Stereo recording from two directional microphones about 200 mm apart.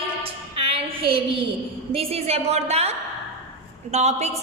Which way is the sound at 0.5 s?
30° right (ahead or behind).